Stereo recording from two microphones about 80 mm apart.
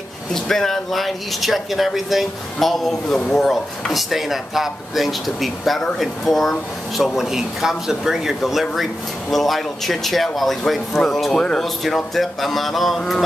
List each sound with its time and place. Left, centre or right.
0.3 s speech: centre